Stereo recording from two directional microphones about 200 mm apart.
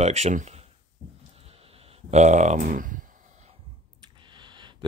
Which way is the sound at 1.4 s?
30° right (ahead or behind).